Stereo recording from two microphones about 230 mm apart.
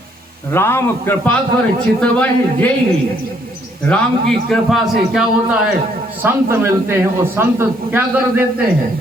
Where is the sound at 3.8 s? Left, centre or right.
Centre.